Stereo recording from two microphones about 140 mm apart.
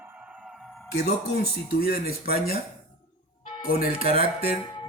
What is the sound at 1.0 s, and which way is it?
Speech, 90° left.